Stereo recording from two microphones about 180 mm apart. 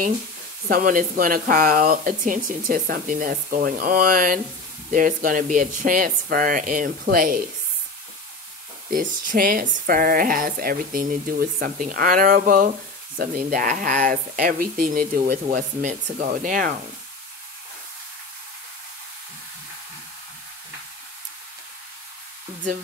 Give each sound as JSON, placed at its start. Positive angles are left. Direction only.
{"t": 0.7, "sound": "speech", "side_deg": -50}
{"t": 9.2, "sound": "speech", "side_deg": -50}
{"t": 15.5, "sound": "speech", "side_deg": -40}